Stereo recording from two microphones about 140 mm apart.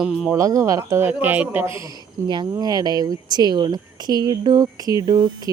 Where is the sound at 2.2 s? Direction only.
35° right (ahead or behind).